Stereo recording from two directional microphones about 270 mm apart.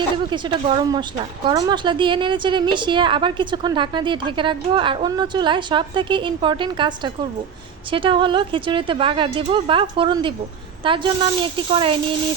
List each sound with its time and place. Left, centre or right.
0.8 s a woman's voice: centre